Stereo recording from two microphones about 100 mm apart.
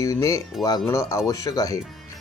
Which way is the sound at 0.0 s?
35° left (ahead or behind).